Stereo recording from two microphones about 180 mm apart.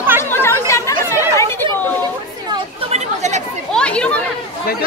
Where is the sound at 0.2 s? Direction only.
10° left (ahead or behind).